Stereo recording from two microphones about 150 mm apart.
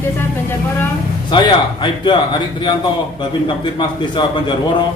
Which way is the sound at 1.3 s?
30° left (ahead or behind).